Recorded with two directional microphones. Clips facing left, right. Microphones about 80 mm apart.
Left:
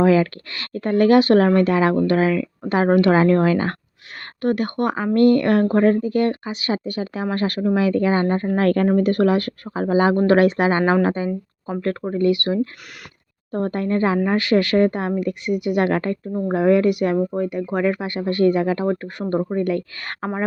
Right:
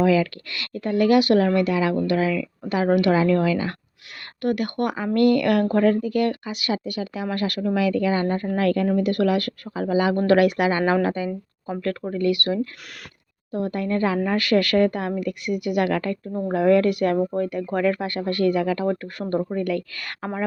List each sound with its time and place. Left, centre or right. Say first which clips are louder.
0.0 s speech: left 3 dB; left
4.4 s speech: left 2 dB; left
8.5 s speech: left 4 dB; left
13.5 s speech: left 3 dB; left